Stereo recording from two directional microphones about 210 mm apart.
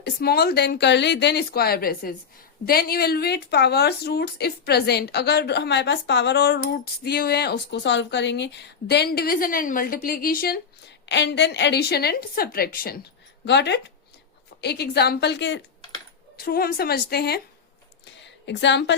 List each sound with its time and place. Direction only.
0.0 s speech: 50° left (ahead or behind)
11.0 s speech: 55° left (ahead or behind)
16.4 s speech: 45° left (ahead or behind)
18.0 s a sound: 55° left (ahead or behind)